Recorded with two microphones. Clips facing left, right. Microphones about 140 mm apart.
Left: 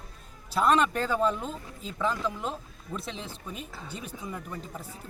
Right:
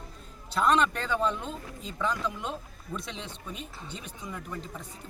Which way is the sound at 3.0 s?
35° left (ahead or behind).